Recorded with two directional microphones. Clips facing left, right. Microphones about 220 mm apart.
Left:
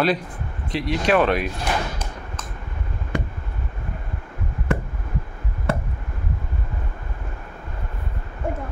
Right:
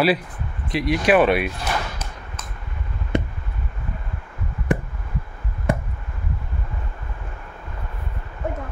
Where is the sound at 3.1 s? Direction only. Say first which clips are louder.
Right 4 dB; 20° right (ahead or behind).